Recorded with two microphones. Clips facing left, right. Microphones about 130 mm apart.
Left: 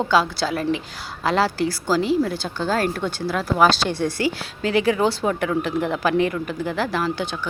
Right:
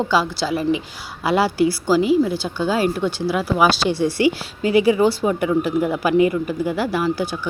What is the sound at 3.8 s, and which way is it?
Speech, 55° left (ahead or behind).